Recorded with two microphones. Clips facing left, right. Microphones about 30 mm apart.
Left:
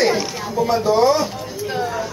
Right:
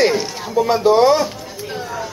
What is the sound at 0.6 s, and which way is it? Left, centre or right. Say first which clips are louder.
Speech: right 2 dB; right.